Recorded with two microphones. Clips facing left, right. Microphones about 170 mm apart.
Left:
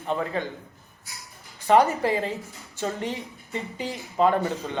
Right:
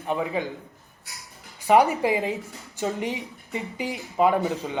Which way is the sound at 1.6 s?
15° right (ahead or behind).